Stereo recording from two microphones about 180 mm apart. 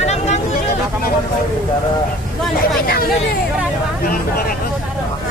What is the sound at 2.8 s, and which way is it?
Speech, 55° left (ahead or behind).